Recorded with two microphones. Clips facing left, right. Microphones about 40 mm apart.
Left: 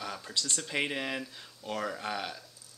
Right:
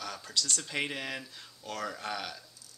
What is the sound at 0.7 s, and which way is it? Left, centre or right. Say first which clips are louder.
Speech: left 2 dB; centre.